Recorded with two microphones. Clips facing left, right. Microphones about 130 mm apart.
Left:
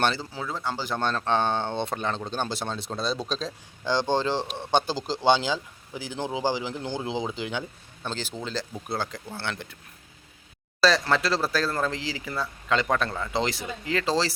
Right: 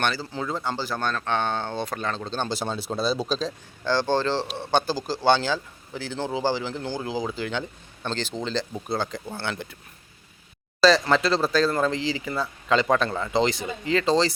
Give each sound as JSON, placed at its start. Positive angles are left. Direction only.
{"t": 0.0, "sound": "speech", "side_deg": 25}
{"t": 0.3, "sound": "speech", "side_deg": 0}
{"t": 0.8, "sound": "speech", "side_deg": 20}
{"t": 2.5, "sound": "speech", "side_deg": 0}
{"t": 3.8, "sound": "speech", "side_deg": 15}
{"t": 10.8, "sound": "speech", "side_deg": 0}